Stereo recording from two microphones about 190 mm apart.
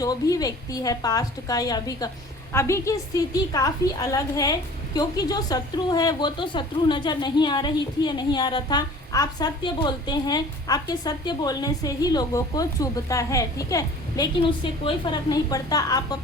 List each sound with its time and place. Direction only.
0.0 s a woman's voice: 20° left (ahead or behind)